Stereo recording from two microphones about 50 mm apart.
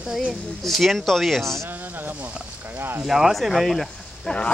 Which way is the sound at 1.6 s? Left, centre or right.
Right.